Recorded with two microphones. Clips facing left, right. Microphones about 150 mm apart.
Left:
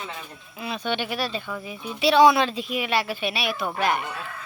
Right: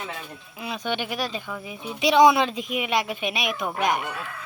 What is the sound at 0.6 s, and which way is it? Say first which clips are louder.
Speech: left 1 dB; 10° right (ahead or behind).